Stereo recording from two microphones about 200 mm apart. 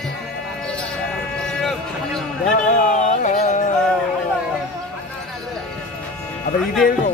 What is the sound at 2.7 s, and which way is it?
Music, 40° left (ahead or behind).